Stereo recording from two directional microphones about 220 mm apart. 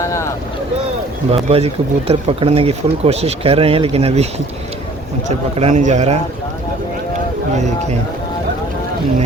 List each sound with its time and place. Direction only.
1.3 s speech: 25° right (ahead or behind)
5.5 s a man's voice: 30° right (ahead or behind)
7.5 s a man's voice: 30° right (ahead or behind)